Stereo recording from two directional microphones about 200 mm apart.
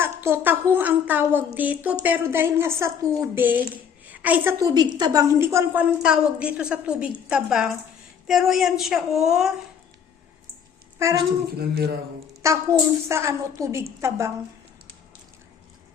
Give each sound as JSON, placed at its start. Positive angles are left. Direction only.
{"t": 0.0, "sound": "a woman's voice", "side_deg": -10}
{"t": 4.7, "sound": "a woman's voice", "side_deg": -20}
{"t": 11.0, "sound": "a woman's voice", "side_deg": -15}
{"t": 11.5, "sound": "speech", "side_deg": -55}
{"t": 12.4, "sound": "a woman's voice", "side_deg": -15}